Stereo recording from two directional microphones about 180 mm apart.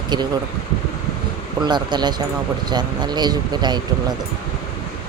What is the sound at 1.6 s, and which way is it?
Speech, 25° right (ahead or behind).